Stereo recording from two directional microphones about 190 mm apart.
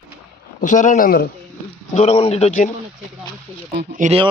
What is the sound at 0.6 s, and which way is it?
Speech, 40° left (ahead or behind).